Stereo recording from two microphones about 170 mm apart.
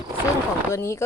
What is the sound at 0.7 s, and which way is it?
Speech, 15° left (ahead or behind).